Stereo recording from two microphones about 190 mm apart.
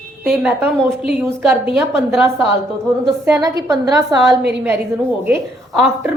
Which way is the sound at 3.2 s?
15° right (ahead or behind).